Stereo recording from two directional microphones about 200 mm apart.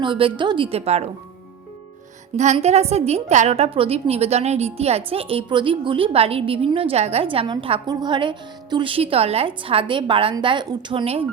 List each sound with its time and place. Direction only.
0.0 s a woman's voice: 25° right (ahead or behind)
2.3 s a woman's voice: 35° right (ahead or behind)